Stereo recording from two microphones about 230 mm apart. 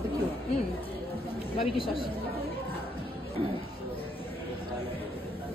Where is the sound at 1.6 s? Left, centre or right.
Left.